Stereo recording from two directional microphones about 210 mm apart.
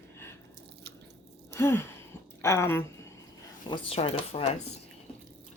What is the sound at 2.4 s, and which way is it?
Speech, 15° left (ahead or behind).